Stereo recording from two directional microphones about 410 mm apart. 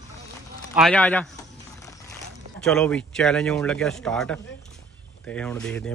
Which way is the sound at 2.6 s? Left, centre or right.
Centre.